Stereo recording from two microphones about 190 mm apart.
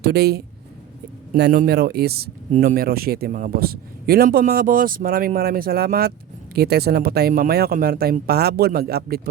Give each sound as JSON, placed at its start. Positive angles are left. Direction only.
{"t": 0.0, "sound": "a man's voice", "side_deg": -55}